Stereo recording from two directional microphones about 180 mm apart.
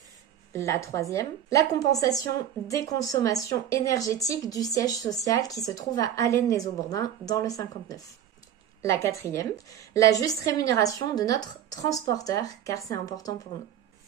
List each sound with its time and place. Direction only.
0.5 s a woman's voice: 15° left (ahead or behind)